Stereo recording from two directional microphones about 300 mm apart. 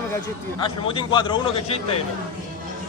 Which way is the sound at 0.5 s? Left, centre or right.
Centre.